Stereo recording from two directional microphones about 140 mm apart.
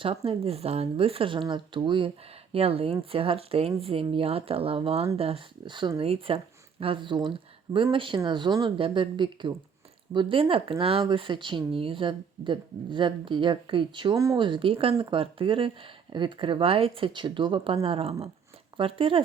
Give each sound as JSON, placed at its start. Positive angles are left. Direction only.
{"t": 0.0, "sound": "speech", "side_deg": -45}